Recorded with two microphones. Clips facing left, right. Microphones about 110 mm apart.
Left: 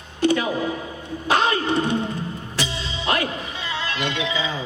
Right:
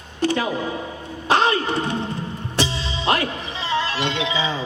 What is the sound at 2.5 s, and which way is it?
Music, 30° right (ahead or behind).